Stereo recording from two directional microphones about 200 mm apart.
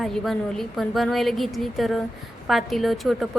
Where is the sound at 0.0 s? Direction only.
Centre (ahead or behind).